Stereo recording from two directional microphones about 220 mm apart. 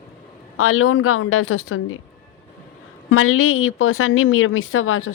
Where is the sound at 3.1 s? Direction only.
70° left (ahead or behind).